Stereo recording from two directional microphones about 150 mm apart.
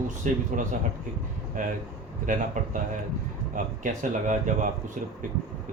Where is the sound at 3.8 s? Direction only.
55° right (ahead or behind).